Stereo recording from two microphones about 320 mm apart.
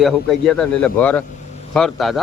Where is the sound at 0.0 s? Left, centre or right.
Centre.